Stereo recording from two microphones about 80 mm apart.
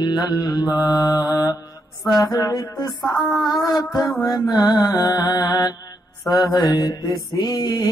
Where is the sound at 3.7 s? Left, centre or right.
Left.